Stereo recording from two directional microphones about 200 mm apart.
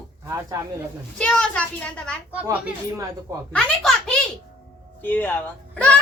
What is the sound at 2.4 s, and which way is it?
Speech, 15° right (ahead or behind).